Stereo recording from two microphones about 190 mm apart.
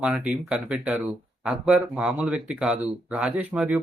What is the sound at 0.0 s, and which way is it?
Speech, 5° right (ahead or behind).